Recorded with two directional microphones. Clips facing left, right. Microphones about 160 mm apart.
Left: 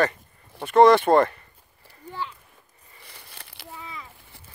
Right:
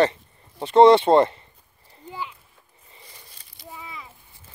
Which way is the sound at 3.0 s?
65° left (ahead or behind).